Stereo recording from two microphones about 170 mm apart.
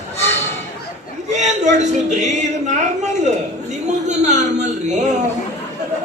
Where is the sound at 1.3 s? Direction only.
45° right (ahead or behind).